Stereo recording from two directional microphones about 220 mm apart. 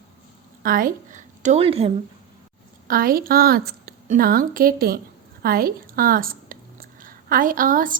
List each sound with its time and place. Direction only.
0.6 s a woman's voice: 40° right (ahead or behind)
2.8 s a woman's voice: 40° right (ahead or behind)